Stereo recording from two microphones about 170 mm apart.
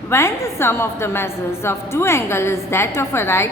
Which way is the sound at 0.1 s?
15° left (ahead or behind).